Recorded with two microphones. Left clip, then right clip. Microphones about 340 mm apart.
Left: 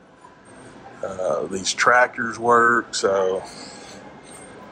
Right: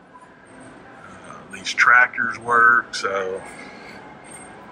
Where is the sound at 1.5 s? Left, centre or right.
Centre.